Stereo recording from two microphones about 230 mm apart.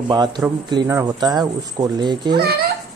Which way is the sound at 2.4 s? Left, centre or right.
Right.